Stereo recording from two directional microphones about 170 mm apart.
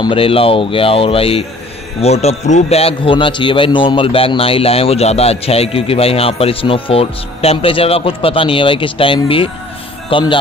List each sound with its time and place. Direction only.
0.0 s speech: 30° left (ahead or behind)